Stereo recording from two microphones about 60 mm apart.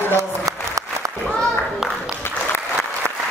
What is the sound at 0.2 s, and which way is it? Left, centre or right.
Applause, right.